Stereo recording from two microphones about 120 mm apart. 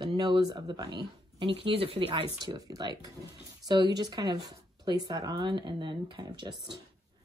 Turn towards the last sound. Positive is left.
turn(degrees=-40)  # may be behind; listen again after turning